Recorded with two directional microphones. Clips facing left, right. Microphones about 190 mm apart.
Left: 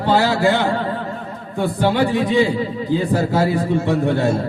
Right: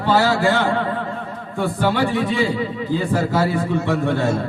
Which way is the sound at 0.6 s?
35° left (ahead or behind).